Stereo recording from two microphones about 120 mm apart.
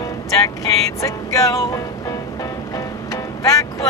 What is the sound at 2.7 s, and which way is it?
Music, 25° left (ahead or behind).